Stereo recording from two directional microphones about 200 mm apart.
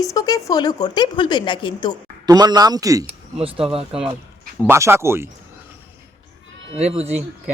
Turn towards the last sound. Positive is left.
turn(degrees=-30)  # may be behind; listen again after turning